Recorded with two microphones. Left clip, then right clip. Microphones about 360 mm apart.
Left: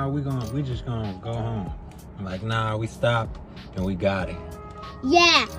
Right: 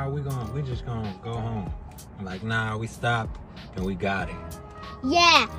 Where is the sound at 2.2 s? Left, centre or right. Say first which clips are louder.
Left 1 dB; centre.